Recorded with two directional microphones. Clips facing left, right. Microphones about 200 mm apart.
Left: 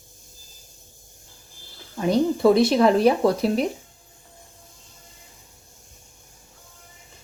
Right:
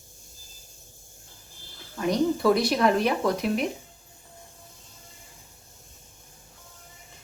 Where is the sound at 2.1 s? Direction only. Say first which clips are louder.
Left 4 dB; 25° left (ahead or behind).